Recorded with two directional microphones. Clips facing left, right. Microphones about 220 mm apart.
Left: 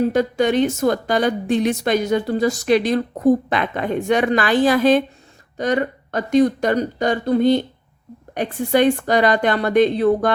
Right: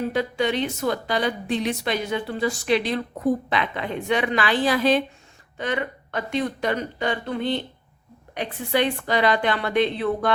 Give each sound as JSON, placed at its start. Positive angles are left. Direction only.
{"t": 0.1, "sound": "a woman's voice", "side_deg": 45}